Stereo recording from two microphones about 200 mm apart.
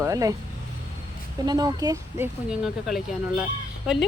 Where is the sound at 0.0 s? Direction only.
15° right (ahead or behind).